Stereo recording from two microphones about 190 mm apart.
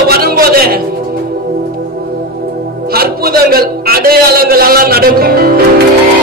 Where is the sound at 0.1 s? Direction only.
55° right (ahead or behind).